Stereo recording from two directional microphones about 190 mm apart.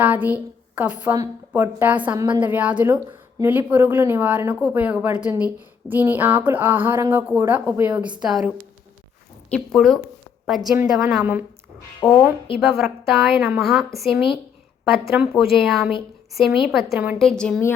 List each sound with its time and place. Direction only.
0.0 s a woman's voice: 10° right (ahead or behind)
9.5 s a woman's voice: centre (ahead or behind)
12.0 s speech: 15° left (ahead or behind)
12.5 s a woman's voice: centre (ahead or behind)